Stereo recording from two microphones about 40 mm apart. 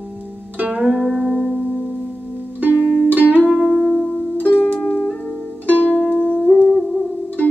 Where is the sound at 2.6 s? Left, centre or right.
Right.